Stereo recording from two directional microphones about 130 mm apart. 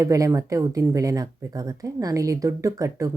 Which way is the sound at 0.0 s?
25° right (ahead or behind).